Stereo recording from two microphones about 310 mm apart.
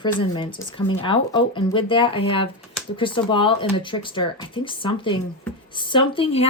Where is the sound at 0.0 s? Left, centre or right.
Centre.